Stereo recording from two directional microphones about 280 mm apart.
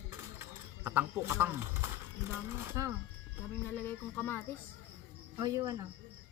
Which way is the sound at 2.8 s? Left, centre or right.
Centre.